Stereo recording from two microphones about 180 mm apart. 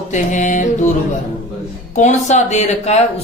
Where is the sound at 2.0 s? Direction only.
40° left (ahead or behind).